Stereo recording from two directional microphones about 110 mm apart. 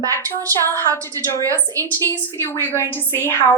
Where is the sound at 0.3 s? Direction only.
30° right (ahead or behind).